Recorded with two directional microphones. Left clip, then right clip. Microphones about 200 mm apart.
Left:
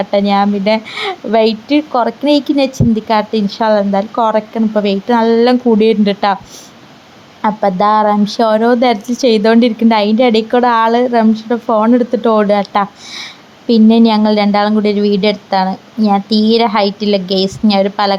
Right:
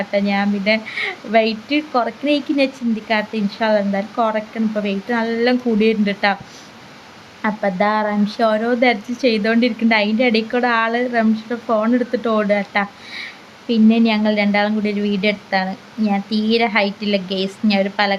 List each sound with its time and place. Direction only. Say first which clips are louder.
0.0 s a woman's voice: left 7 dB; 25° left (ahead or behind)
7.4 s a woman's voice: left 7 dB; 25° left (ahead or behind)